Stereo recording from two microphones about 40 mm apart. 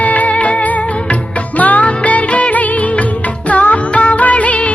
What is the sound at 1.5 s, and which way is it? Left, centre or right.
Music, left.